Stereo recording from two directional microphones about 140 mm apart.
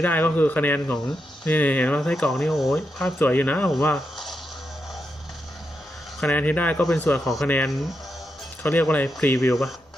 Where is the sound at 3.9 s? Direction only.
Centre (ahead or behind).